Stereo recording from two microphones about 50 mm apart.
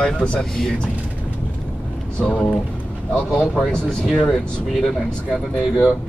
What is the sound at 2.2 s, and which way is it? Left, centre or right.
Speech, centre.